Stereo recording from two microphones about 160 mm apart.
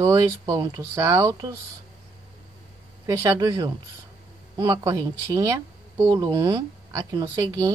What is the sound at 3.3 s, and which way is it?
Speech, 20° right (ahead or behind).